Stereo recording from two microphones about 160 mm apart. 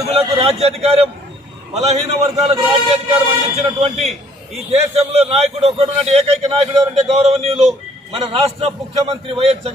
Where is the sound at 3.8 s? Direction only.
40° right (ahead or behind).